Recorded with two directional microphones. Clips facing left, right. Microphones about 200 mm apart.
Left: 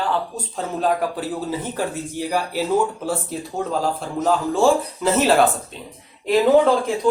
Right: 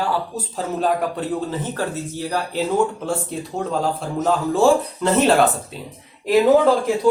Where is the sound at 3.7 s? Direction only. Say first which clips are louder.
Right 1 dB; centre (ahead or behind).